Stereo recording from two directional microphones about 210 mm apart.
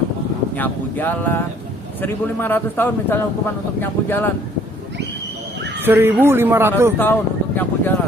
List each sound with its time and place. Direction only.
0.5 s a man's voice: 10° left (ahead or behind)
5.8 s speech: 10° right (ahead or behind)
7.0 s a man's voice: 10° left (ahead or behind)